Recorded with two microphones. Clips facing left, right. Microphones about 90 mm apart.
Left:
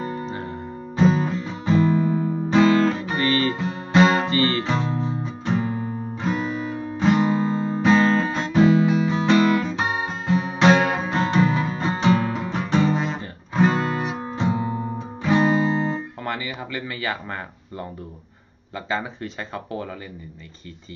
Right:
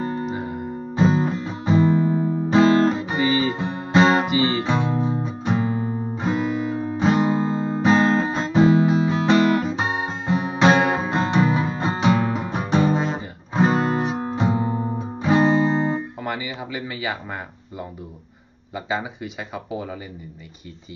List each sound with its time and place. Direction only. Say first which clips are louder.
0.3 s music: right 3 dB; 10° right (ahead or behind)
0.9 s music: even; 25° right (ahead or behind)
2.5 s guitar: right 1 dB; 30° right (ahead or behind)
4.3 s music: right 1 dB; 15° right (ahead or behind)
6.2 s guitar: right 2 dB; 25° right (ahead or behind)
8.5 s music: even; 25° right (ahead or behind)
13.1 s guitar: right 1 dB; 20° right (ahead or behind)
14.4 s music: right 1 dB; 30° right (ahead or behind)
16.3 s a sound: left 1 dB; 10° right (ahead or behind)
18.9 s speech: even; 10° right (ahead or behind)